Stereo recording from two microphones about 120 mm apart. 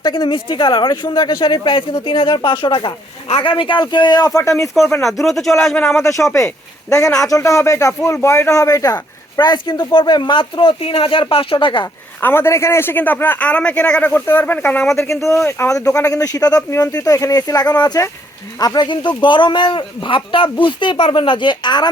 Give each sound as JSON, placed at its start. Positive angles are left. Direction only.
{"t": 0.0, "sound": "speech", "side_deg": 35}
{"t": 4.4, "sound": "speech", "side_deg": 25}
{"t": 5.0, "sound": "speech", "side_deg": 0}
{"t": 6.0, "sound": "speech", "side_deg": 25}
{"t": 12.2, "sound": "a man's voice", "side_deg": 20}